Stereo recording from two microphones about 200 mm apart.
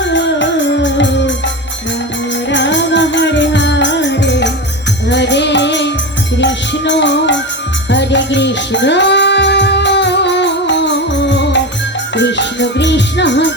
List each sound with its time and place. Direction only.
0.0 s music: 65° left (ahead or behind)
2.5 s music: 65° left (ahead or behind)